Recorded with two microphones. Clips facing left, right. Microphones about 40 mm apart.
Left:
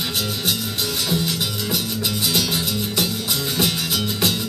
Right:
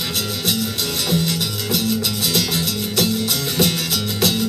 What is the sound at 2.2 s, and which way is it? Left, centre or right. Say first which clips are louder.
Music: left 1 dB; centre.